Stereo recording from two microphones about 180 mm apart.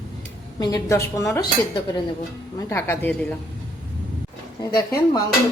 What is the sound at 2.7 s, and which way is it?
Speech, 15° left (ahead or behind).